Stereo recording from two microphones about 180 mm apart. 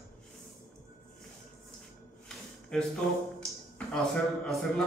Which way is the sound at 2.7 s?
5° left (ahead or behind).